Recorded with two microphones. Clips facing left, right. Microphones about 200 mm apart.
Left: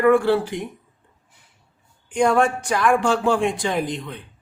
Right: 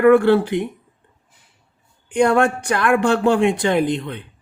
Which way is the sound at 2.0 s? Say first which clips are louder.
Right 2 dB; 65° right (ahead or behind).